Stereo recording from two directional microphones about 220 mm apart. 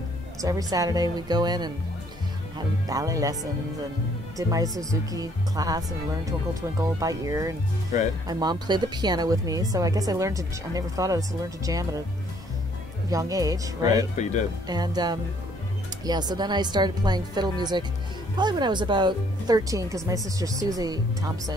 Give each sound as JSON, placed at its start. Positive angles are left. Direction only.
{"t": 0.4, "sound": "speech", "side_deg": -15}
{"t": 2.9, "sound": "speech", "side_deg": -15}
{"t": 4.4, "sound": "speech", "side_deg": -15}
{"t": 13.1, "sound": "speech", "side_deg": -15}
{"t": 14.1, "sound": "speech", "side_deg": 35}
{"t": 14.7, "sound": "speech", "side_deg": -20}